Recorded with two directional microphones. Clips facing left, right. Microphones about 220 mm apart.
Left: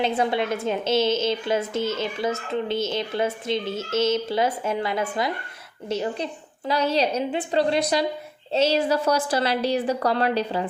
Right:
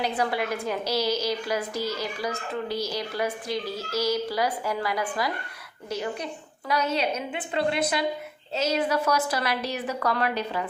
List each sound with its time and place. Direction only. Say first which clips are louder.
0.0 s a woman's voice: left 4 dB; 25° left (ahead or behind)